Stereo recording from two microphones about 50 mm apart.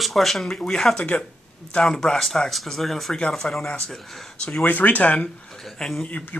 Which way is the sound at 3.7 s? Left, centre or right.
Centre.